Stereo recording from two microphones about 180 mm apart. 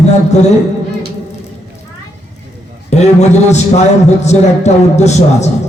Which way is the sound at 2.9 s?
40° left (ahead or behind).